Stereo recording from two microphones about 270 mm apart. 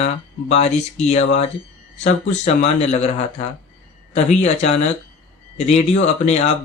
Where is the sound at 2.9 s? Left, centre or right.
Left.